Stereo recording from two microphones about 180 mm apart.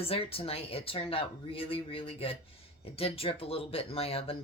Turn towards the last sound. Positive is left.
turn(degrees=30)  # may be behind; listen again after turning